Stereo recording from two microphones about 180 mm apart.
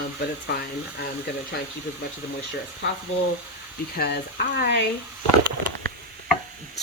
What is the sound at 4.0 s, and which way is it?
Speech, 55° left (ahead or behind).